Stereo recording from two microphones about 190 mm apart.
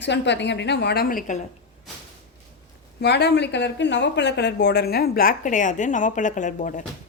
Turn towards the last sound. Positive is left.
turn(degrees=40)  # may be behind; listen again after turning